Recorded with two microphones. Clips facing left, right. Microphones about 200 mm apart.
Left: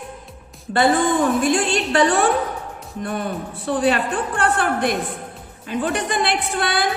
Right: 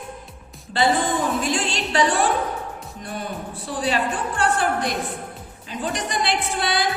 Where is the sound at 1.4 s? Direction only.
50° left (ahead or behind).